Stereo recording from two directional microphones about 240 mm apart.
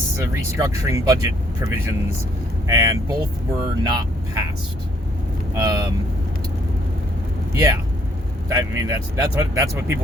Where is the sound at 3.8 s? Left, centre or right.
Centre.